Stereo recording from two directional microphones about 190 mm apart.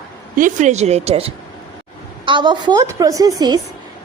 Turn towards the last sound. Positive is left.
turn(degrees=-20)  # may be behind; listen again after turning